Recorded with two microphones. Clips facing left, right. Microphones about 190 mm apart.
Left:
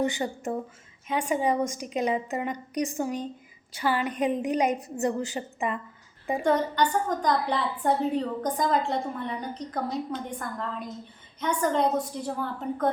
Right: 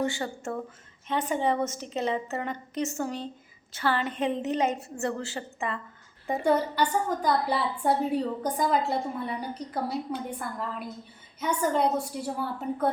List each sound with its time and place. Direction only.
0.0 s a woman's voice: 20° left (ahead or behind)
6.4 s a woman's voice: 5° right (ahead or behind)